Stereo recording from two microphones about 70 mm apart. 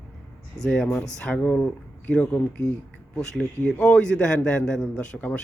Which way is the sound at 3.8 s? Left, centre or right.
Centre.